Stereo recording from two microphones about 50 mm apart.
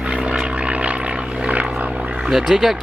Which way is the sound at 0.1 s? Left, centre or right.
Centre.